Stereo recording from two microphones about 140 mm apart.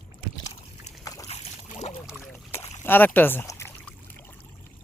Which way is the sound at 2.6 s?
15° left (ahead or behind).